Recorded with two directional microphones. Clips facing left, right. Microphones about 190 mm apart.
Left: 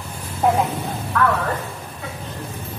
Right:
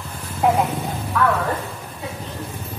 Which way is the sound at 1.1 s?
10° right (ahead or behind).